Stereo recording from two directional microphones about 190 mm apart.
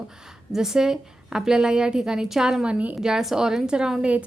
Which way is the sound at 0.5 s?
5° right (ahead or behind).